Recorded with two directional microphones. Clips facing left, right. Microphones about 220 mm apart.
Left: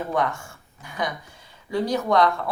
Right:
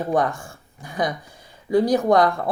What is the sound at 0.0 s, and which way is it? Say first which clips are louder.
Speech: right 4 dB; 35° right (ahead or behind).